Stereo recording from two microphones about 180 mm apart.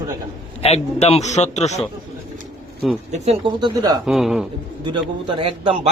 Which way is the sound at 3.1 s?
35° right (ahead or behind).